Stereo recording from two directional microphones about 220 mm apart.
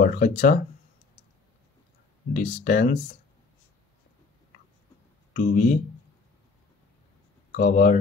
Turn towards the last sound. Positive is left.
turn(degrees=35)  # may be behind; listen again after turning